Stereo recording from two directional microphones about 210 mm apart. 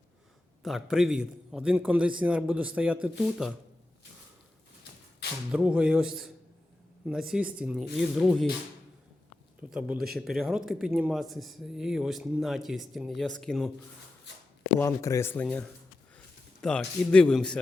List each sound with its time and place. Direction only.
0.6 s speech: centre (ahead or behind)
5.5 s speech: 5° right (ahead or behind)
9.6 s a man's voice: 5° right (ahead or behind)
14.3 s a sound: 55° left (ahead or behind)
14.8 s a man's voice: 15° left (ahead or behind)